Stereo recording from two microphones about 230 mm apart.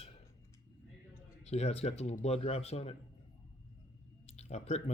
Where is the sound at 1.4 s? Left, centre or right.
Left.